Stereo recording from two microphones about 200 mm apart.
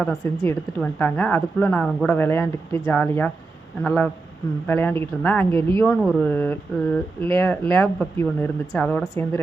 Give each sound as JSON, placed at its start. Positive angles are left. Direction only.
{"t": 0.0, "sound": "a woman's voice", "side_deg": 0}
{"t": 5.5, "sound": "speech", "side_deg": -25}
{"t": 5.8, "sound": "a woman's voice", "side_deg": 5}